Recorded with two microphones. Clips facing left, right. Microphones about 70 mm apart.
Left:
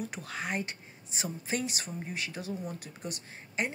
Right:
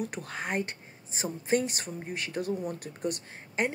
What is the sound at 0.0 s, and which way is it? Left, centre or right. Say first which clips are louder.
Speech: right 2 dB; right.